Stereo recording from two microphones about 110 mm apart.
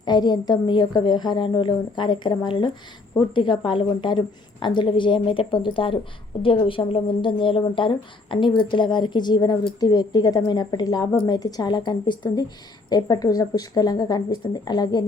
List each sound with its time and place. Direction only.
0.0 s a woman's voice: 40° left (ahead or behind)